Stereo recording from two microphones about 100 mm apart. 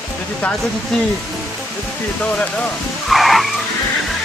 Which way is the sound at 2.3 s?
10° left (ahead or behind).